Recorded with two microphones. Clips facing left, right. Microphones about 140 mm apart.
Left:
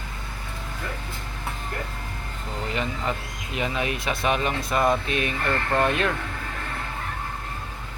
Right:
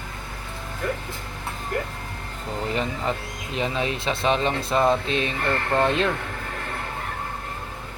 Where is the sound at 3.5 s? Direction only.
30° right (ahead or behind).